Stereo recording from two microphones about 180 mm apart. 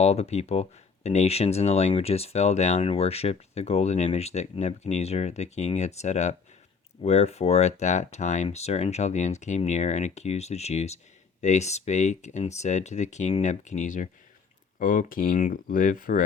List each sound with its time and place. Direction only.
0.0 s speech: 35° left (ahead or behind)